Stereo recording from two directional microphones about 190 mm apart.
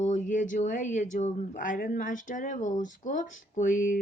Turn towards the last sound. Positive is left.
turn(degrees=45)  # may be behind; listen again after turning